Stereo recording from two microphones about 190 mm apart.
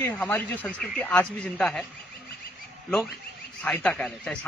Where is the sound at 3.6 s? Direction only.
5° left (ahead or behind).